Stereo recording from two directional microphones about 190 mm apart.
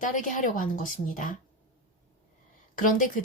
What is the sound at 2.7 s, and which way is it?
Speech, 45° left (ahead or behind).